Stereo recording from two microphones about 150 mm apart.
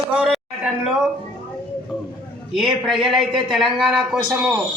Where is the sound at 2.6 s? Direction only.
Centre (ahead or behind).